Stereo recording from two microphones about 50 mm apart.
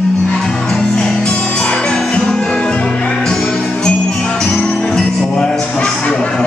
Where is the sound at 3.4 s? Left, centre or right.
Left.